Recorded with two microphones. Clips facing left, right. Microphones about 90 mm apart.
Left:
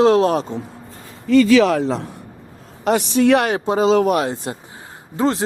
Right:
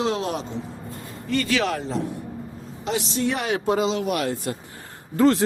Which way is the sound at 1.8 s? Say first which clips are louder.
Left 6 dB; 90° left.